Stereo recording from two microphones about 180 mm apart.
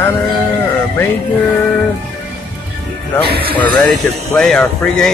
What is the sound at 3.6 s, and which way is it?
Speech, 25° left (ahead or behind).